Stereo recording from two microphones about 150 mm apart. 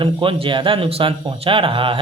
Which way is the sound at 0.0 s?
35° right (ahead or behind).